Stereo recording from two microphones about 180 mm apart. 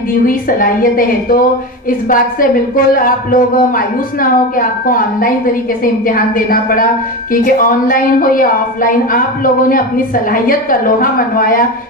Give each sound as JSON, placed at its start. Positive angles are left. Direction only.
{"t": 0.3, "sound": "a woman's voice", "side_deg": 55}